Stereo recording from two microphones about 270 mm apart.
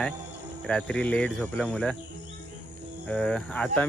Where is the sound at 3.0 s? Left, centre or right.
Centre.